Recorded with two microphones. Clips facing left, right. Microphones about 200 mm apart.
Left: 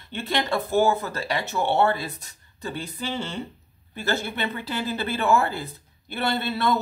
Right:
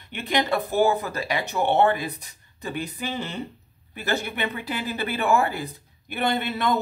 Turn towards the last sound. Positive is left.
turn(degrees=-15)  # may be behind; listen again after turning